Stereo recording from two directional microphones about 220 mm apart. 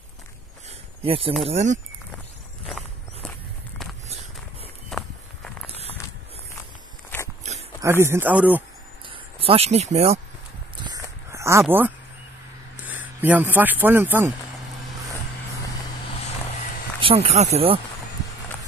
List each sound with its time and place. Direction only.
0.7 s a sound: 25° right (ahead or behind)
1.4 s speech: 30° right (ahead or behind)
2.7 s walk: 5° left (ahead or behind)
4.8 s walk: centre (ahead or behind)
5.7 s walk: 30° right (ahead or behind)
7.1 s walk: 5° left (ahead or behind)
7.8 s speech: 10° right (ahead or behind)
9.0 s speech: 25° right (ahead or behind)
10.8 s livestock: 15° right (ahead or behind)
11.6 s speech: 10° right (ahead or behind)
17.0 s speech: 25° right (ahead or behind)